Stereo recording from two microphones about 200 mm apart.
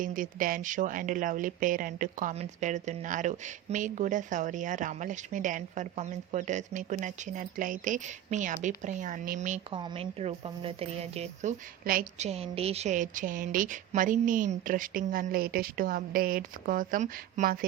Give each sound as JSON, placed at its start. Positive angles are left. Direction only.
{"t": 0.0, "sound": "speech", "side_deg": -40}
{"t": 9.7, "sound": "speech", "side_deg": -25}
{"t": 11.9, "sound": "a woman's voice", "side_deg": -45}
{"t": 12.3, "sound": "a woman's voice", "side_deg": -30}